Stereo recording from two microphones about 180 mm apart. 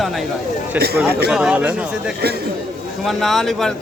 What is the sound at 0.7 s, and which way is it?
Speech, 65° right (ahead or behind).